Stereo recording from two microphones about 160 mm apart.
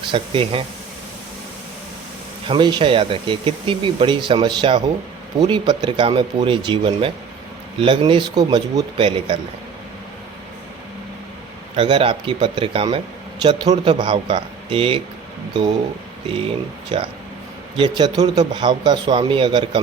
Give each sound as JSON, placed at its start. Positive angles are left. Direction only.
{"t": 0.1, "sound": "speech", "side_deg": -35}
{"t": 2.5, "sound": "a man's voice", "side_deg": -30}
{"t": 11.8, "sound": "a man's voice", "side_deg": -30}
{"t": 16.9, "sound": "a man's voice", "side_deg": -30}